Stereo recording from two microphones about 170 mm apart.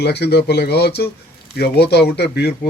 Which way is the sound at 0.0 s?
75° left (ahead or behind).